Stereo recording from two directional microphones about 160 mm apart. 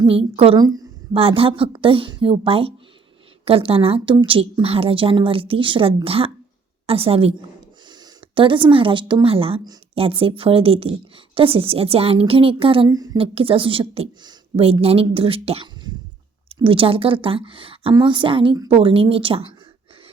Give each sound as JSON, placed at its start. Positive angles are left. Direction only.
{"t": 0.0, "sound": "a woman's voice", "side_deg": -35}
{"t": 0.6, "sound": "a woman's voice", "side_deg": -25}
{"t": 1.1, "sound": "a woman's voice", "side_deg": -35}
{"t": 8.4, "sound": "a woman's voice", "side_deg": -30}